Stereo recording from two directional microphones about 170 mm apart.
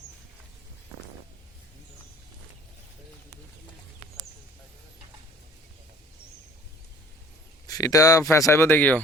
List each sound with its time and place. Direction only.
7.7 s speech: 20° left (ahead or behind)